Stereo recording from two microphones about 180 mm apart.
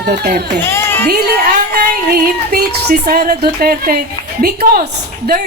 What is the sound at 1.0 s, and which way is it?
Speech, 60° right (ahead or behind).